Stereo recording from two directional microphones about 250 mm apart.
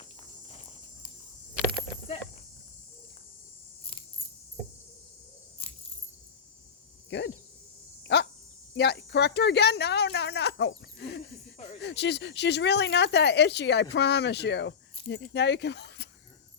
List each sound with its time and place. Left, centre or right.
0.4 s insect: left
7.1 s speech: left
8.0 s a sound: left
8.7 s speech: left